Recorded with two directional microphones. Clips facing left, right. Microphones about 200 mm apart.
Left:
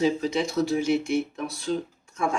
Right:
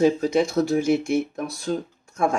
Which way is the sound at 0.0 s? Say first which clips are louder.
Right 5 dB; 50° right (ahead or behind).